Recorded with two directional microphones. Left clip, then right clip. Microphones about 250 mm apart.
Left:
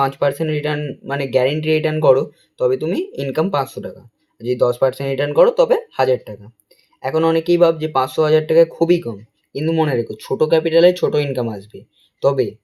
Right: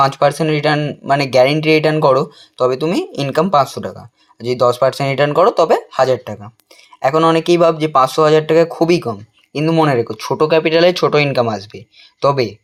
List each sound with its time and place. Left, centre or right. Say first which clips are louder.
0.0 s speech: right 5 dB; centre